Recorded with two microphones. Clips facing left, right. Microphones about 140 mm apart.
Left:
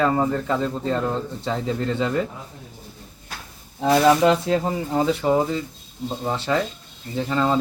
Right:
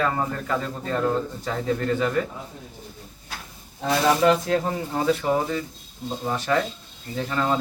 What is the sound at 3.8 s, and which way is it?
Speech, 25° left (ahead or behind).